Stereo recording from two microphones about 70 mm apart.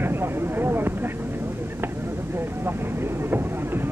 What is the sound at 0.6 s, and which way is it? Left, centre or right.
Vehicle, right.